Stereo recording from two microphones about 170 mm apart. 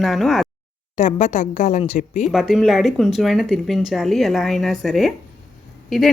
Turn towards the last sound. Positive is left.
turn(degrees=0)  # may be behind; listen again after turning